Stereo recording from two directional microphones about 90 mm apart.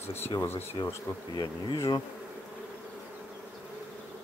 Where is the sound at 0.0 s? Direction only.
25° left (ahead or behind).